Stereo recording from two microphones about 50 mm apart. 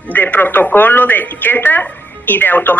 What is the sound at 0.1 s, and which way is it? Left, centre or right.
Speech, left.